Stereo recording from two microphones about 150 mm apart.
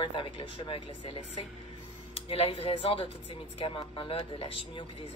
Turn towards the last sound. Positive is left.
turn(degrees=40)  # may be behind; listen again after turning